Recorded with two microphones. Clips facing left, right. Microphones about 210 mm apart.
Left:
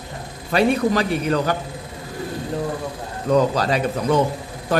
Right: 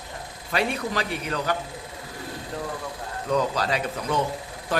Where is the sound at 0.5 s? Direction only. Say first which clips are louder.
Left 9 dB; 40° left (ahead or behind).